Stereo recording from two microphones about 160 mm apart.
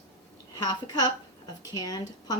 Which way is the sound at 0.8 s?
25° left (ahead or behind).